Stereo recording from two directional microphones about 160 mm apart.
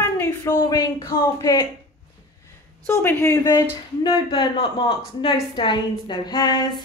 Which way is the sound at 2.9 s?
15° left (ahead or behind).